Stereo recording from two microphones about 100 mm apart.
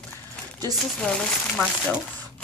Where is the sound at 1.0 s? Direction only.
10° left (ahead or behind).